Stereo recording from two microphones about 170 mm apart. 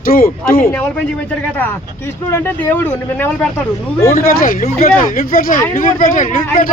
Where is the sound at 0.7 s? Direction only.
5° left (ahead or behind).